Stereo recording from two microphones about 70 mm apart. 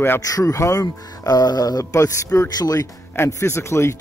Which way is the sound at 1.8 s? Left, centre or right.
Left.